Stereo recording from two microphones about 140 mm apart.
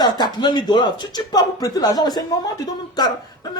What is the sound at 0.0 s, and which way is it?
Speech, 30° left (ahead or behind).